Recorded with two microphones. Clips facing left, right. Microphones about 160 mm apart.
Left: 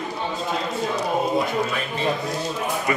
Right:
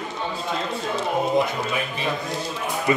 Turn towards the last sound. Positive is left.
turn(degrees=-20)  # may be behind; listen again after turning